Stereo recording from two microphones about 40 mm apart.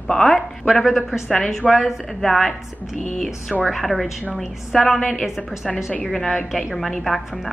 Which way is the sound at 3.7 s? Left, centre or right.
Centre.